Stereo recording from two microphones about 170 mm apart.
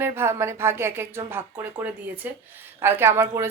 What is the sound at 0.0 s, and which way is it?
Speech, 15° right (ahead or behind).